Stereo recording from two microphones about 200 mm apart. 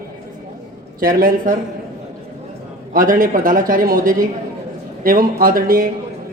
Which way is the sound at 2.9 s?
45° right (ahead or behind).